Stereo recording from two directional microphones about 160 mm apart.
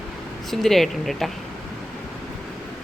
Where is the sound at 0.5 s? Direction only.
Centre (ahead or behind).